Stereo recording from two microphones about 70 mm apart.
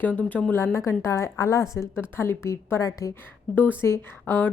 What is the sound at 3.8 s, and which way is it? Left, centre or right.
Speech, left.